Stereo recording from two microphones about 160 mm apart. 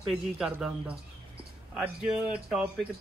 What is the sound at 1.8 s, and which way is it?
Speech, 5° right (ahead or behind).